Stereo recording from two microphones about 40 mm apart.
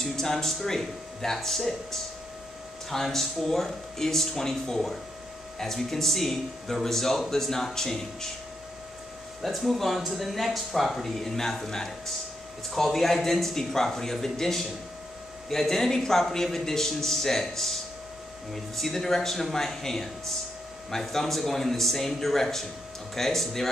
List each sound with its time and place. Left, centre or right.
0.0 s speech: centre
9.4 s speech: centre